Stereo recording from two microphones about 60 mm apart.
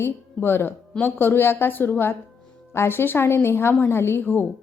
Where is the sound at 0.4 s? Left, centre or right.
Left.